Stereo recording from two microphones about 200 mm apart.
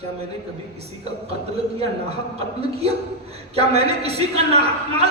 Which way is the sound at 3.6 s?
30° right (ahead or behind).